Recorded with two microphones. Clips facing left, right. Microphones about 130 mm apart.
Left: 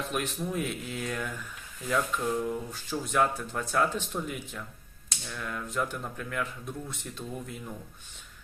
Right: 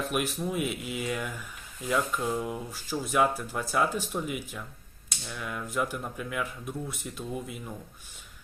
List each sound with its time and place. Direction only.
0.1 s speech: 5° right (ahead or behind)